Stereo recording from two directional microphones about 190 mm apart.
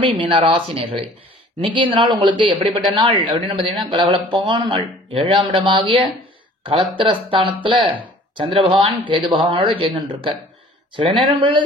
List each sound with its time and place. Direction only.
0.0 s speech: 25° right (ahead or behind)